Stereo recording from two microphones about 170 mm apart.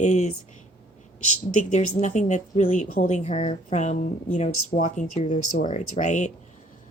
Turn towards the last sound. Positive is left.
turn(degrees=45)  # may be behind; listen again after turning